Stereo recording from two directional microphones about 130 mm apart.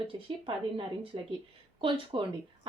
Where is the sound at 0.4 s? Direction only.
40° right (ahead or behind).